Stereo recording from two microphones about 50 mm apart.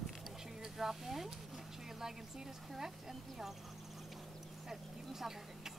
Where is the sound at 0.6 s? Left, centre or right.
Centre.